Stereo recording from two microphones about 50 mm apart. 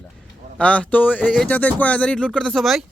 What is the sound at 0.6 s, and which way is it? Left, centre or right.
Speech, left.